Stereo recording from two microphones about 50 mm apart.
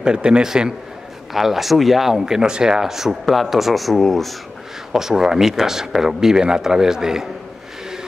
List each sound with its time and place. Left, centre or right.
0.0 s speech: centre
4.9 s speech: centre